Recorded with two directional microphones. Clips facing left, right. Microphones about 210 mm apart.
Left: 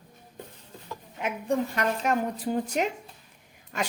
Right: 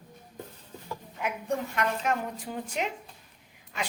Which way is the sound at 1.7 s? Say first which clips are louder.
Left 2 dB; 40° left (ahead or behind).